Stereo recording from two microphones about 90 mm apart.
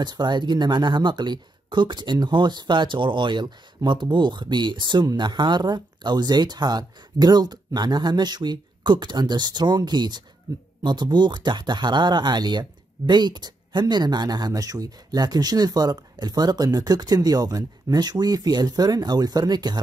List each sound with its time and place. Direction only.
0.0 s speech: 55° right (ahead or behind)
10.5 s speech: 40° right (ahead or behind)
10.8 s speech: 55° right (ahead or behind)